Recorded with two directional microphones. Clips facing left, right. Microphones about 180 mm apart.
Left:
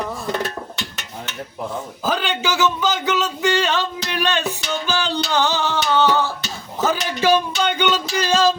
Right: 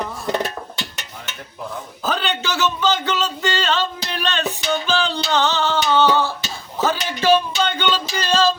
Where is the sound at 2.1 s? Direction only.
10° left (ahead or behind).